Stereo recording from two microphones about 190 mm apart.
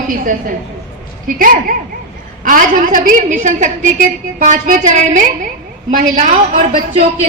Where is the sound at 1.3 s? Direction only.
45° right (ahead or behind).